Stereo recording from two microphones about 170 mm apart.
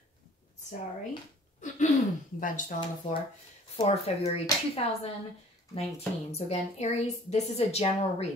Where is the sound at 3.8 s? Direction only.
40° left (ahead or behind).